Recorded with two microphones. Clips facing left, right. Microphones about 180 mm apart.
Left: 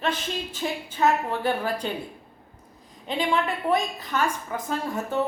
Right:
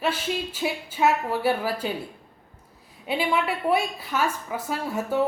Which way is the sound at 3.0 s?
10° right (ahead or behind).